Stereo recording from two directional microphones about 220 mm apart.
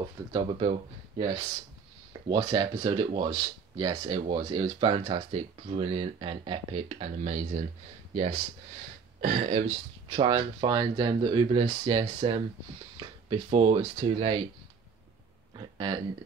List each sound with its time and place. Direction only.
0.3 s speech: 25° right (ahead or behind)
9.2 s speech: 30° right (ahead or behind)
15.5 s speech: 20° right (ahead or behind)